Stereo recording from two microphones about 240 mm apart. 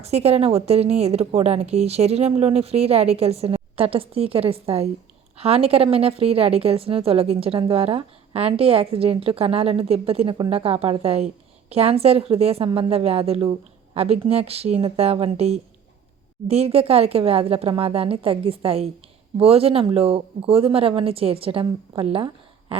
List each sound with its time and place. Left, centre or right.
0.0 s a woman's voice: right